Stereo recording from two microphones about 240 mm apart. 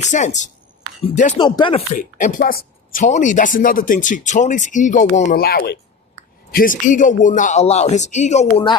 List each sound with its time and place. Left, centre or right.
0.0 s speech: left
2.0 s speech: left